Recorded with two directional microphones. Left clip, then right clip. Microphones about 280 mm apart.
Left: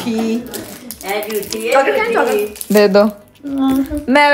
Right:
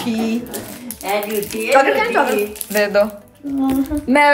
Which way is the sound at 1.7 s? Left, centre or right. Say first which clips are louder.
Left 1 dB; centre.